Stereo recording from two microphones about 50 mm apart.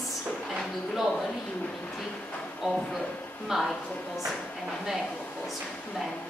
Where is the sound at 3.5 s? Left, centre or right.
Centre.